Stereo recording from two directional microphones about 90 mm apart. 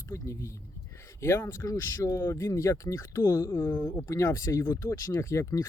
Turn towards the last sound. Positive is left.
turn(degrees=30)  # may be behind; listen again after turning